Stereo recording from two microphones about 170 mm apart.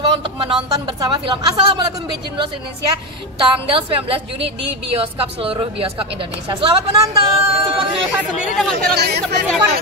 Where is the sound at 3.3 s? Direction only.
35° right (ahead or behind).